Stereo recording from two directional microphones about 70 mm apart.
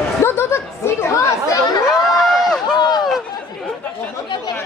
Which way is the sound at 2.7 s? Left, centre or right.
Left.